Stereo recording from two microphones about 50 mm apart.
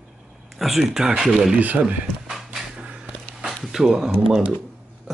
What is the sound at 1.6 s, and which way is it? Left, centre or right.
Speech, right.